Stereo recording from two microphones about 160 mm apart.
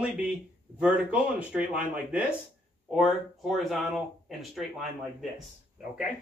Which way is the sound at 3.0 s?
Centre (ahead or behind).